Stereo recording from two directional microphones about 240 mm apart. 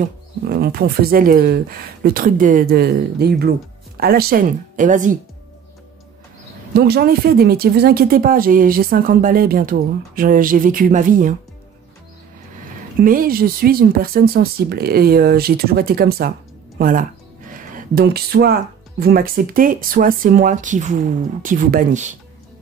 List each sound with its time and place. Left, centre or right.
0.0 s speech: right
6.7 s speech: right
13.0 s speech: right